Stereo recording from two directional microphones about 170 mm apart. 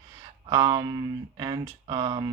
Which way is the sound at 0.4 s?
25° right (ahead or behind).